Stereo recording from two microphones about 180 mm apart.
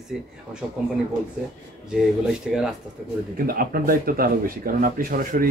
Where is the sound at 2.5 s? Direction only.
Centre (ahead or behind).